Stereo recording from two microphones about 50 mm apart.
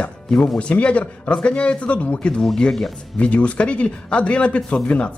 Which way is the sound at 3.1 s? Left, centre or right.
Left.